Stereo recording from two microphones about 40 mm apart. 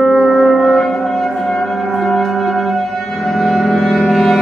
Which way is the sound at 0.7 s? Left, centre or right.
Centre.